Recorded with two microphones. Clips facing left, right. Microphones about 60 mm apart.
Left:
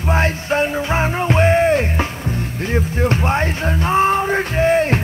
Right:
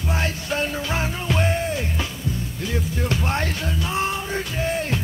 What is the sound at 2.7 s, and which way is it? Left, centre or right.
Speech, left.